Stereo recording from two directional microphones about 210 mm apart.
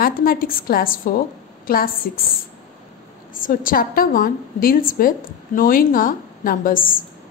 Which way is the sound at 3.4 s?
40° left (ahead or behind).